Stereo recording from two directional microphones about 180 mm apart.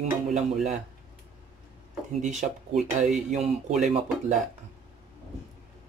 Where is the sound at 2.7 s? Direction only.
40° right (ahead or behind).